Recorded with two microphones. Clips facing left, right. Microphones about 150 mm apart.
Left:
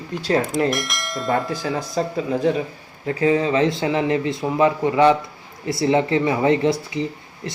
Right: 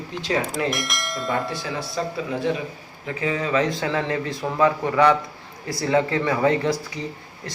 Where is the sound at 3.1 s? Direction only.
35° left (ahead or behind).